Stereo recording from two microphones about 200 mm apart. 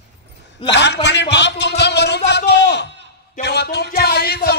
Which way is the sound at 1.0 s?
60° left (ahead or behind).